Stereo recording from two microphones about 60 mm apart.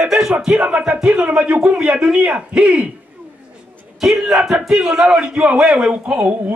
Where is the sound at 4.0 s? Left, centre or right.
Centre.